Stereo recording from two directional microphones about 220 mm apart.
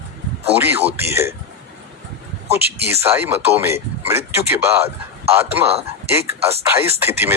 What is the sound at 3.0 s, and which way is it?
Speech, 10° right (ahead or behind).